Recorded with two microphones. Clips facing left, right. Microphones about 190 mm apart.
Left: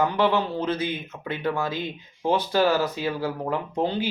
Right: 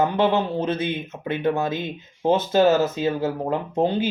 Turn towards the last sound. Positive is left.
turn(degrees=-20)  # may be behind; listen again after turning